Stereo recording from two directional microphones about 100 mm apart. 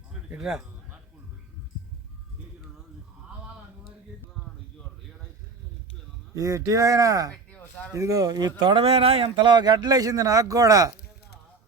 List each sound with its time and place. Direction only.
0.3 s speech: 5° right (ahead or behind)
6.3 s speech: 35° right (ahead or behind)